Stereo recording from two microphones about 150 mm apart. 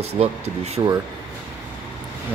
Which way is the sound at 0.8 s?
25° right (ahead or behind).